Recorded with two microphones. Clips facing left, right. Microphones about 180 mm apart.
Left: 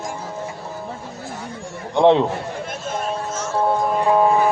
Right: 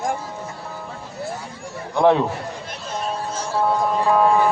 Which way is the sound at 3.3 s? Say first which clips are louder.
Left 1 dB; 30° right (ahead or behind).